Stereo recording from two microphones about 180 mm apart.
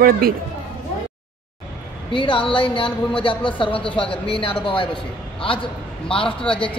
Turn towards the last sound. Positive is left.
turn(degrees=30)  # may be behind; listen again after turning